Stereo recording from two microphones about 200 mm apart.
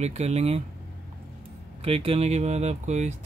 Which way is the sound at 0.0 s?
35° right (ahead or behind).